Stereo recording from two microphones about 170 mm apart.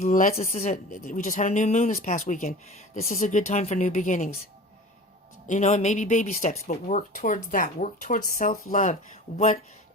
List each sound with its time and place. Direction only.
0.0 s speech: 50° left (ahead or behind)
5.5 s speech: 45° left (ahead or behind)